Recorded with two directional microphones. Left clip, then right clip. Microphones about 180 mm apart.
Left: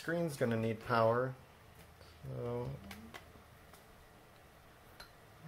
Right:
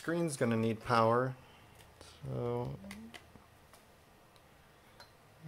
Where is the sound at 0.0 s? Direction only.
35° right (ahead or behind).